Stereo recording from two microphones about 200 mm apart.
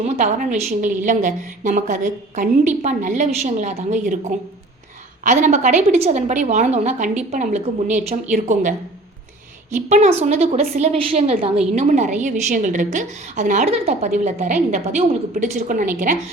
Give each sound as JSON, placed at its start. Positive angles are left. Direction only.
{"t": 0.0, "sound": "a woman's voice", "side_deg": -40}
{"t": 9.7, "sound": "a woman's voice", "side_deg": -35}